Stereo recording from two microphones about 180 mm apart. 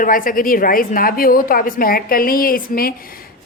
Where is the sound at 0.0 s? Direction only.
50° left (ahead or behind).